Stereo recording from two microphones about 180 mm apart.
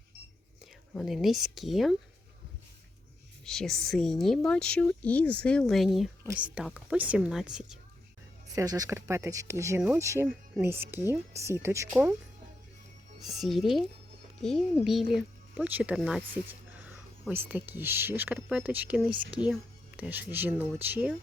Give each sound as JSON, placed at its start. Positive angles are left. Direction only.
{"t": 0.6, "sound": "speech", "side_deg": 0}
{"t": 3.4, "sound": "speech", "side_deg": 0}
{"t": 8.5, "sound": "speech", "side_deg": -20}
{"t": 13.2, "sound": "speech", "side_deg": 0}
{"t": 14.8, "sound": "speech", "side_deg": 0}